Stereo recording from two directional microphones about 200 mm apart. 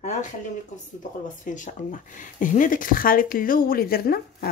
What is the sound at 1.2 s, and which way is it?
Speech, 40° left (ahead or behind).